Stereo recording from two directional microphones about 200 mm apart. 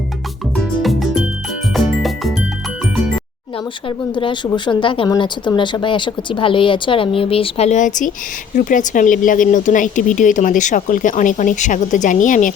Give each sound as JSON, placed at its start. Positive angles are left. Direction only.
{"t": 0.5, "sound": "music", "side_deg": 0}
{"t": 3.8, "sound": "speech", "side_deg": 25}